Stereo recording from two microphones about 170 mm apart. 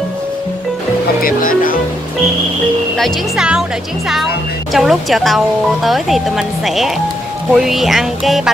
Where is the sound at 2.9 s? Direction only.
Centre (ahead or behind).